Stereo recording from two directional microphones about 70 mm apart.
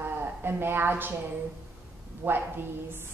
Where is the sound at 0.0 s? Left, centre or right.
Right.